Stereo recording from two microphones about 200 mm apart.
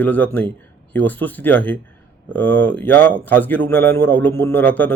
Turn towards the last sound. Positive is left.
turn(degrees=10)  # may be behind; listen again after turning